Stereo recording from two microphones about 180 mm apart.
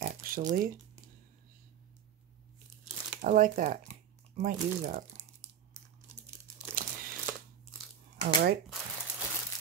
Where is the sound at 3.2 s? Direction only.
45° right (ahead or behind).